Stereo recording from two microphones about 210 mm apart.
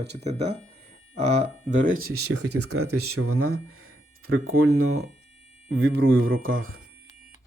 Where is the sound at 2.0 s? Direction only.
85° right.